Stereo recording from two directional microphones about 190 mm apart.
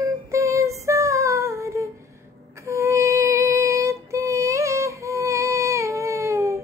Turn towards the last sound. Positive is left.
turn(degrees=-15)  # may be behind; listen again after turning